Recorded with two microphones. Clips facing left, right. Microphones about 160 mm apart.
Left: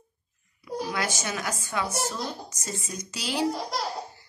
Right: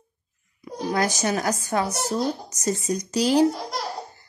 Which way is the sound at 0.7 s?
40° right (ahead or behind).